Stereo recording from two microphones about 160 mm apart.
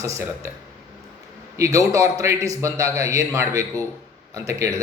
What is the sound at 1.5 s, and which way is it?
A man's voice, 20° right (ahead or behind).